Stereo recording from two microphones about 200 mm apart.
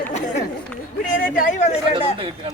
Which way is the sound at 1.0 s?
45° left (ahead or behind).